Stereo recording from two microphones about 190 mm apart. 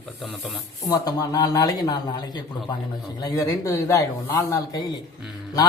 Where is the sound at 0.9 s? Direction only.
20° left (ahead or behind).